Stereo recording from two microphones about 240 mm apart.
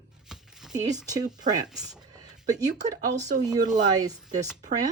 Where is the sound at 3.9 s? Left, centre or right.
Centre.